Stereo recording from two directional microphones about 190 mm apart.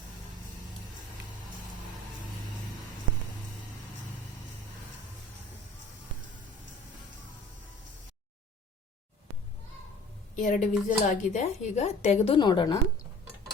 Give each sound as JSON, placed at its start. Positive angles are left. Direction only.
{"t": 10.3, "sound": "a woman's voice", "side_deg": 45}